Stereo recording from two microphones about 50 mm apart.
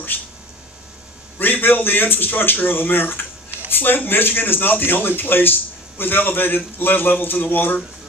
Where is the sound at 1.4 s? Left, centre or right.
Left.